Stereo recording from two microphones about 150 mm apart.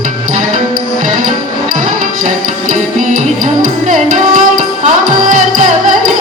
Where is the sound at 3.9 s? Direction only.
60° right (ahead or behind).